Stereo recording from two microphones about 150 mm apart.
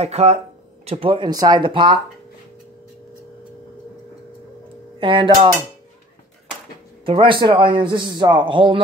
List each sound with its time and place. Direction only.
0.0 s a man's voice: 45° right (ahead or behind)
4.9 s speech: 35° right (ahead or behind)
7.1 s a man's voice: 35° right (ahead or behind)